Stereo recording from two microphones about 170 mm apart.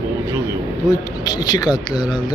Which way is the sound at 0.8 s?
25° left (ahead or behind).